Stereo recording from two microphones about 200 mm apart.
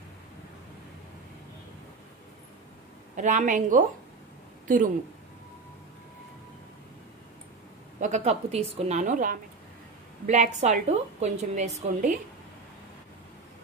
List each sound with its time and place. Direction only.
3.2 s a woman's voice: 40° right (ahead or behind)
8.0 s a woman's voice: 35° right (ahead or behind)